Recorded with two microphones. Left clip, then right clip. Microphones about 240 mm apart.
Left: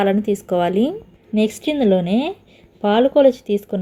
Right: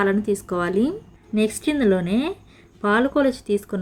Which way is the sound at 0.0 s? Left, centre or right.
Centre.